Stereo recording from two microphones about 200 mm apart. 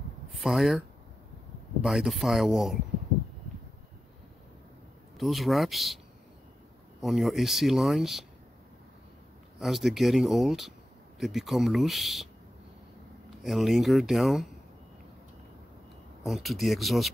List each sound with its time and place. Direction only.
0.3 s speech: centre (ahead or behind)
5.1 s speech: centre (ahead or behind)
7.0 s speech: centre (ahead or behind)
9.6 s speech: centre (ahead or behind)
13.4 s speech: centre (ahead or behind)
16.3 s speech: centre (ahead or behind)